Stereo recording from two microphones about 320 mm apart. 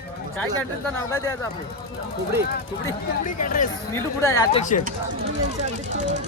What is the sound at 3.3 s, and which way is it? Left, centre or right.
Speech, left.